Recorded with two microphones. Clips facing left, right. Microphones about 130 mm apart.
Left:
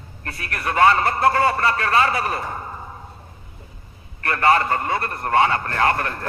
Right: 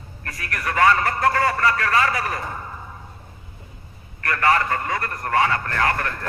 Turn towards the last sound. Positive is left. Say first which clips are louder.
# left 2 dB
turn(degrees=30)  # may be behind; listen again after turning